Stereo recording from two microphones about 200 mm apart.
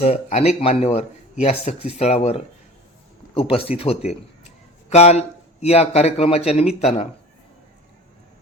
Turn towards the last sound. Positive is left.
turn(degrees=30)  # may be behind; listen again after turning